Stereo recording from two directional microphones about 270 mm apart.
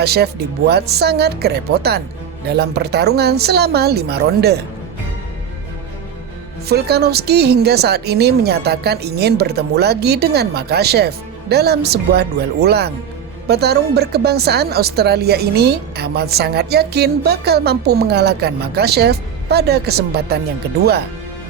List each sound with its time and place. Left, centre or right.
0.0 s speech: right
6.7 s speech: right